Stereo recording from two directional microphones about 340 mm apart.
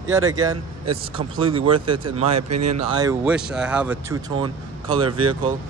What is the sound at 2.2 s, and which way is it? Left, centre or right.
Speech, right.